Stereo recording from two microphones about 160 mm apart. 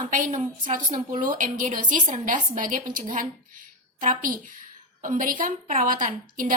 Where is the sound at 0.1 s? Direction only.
50° right (ahead or behind).